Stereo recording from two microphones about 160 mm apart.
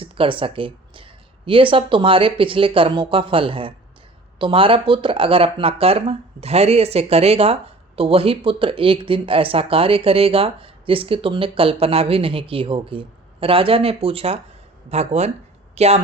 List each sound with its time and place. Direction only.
0.0 s speech: 35° right (ahead or behind)